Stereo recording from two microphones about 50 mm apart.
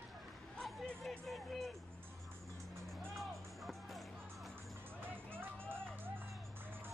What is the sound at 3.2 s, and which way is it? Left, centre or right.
Music, centre.